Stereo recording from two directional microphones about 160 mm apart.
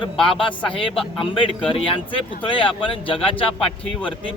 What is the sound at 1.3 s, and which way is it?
Speech, 35° left (ahead or behind).